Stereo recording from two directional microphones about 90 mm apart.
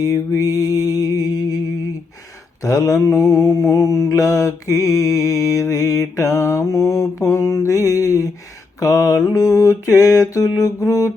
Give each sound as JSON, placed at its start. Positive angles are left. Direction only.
{"t": 0.0, "sound": "music", "side_deg": 35}
{"t": 2.6, "sound": "mantra", "side_deg": 35}